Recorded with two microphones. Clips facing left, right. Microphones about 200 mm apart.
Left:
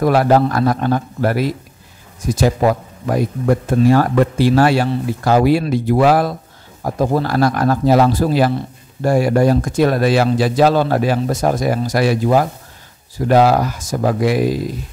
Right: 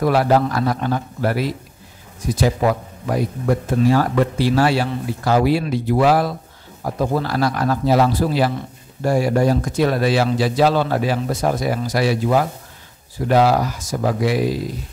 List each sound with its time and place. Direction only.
0.0 s speech: 45° left (ahead or behind)
9.0 s speech: 60° left (ahead or behind)